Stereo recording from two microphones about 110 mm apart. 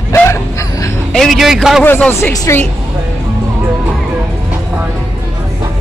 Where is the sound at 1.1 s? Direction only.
Centre (ahead or behind).